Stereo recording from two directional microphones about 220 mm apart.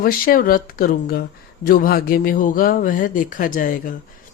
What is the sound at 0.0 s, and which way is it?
Speech, 40° left (ahead or behind).